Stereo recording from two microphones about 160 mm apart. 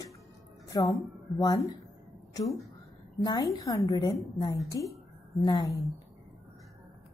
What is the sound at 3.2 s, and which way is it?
A woman's voice, 25° left (ahead or behind).